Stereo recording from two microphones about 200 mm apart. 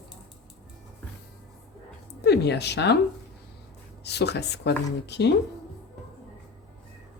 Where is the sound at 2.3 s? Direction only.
55° left (ahead or behind).